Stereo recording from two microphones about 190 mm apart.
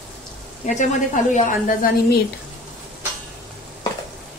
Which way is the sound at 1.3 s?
45° left (ahead or behind).